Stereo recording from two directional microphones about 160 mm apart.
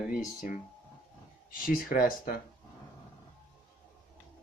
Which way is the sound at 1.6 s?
60° left (ahead or behind).